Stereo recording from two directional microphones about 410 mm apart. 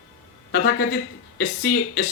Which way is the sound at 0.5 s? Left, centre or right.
Left.